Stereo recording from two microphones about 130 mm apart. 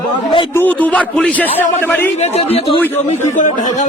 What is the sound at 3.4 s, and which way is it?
Speech, 75° left (ahead or behind).